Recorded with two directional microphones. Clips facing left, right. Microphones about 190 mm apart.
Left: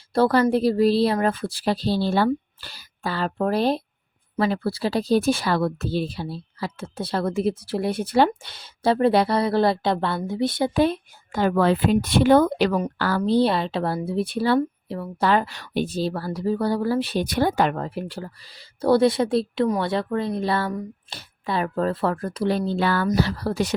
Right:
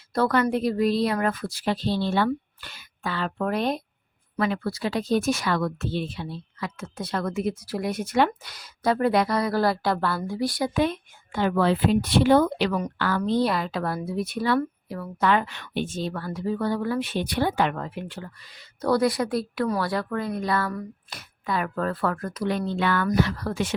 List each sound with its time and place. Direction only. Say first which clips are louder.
0.1 s speech: left 4 dB; 30° left (ahead or behind)